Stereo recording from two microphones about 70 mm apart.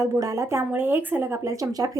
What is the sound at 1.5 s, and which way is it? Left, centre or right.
Speech, right.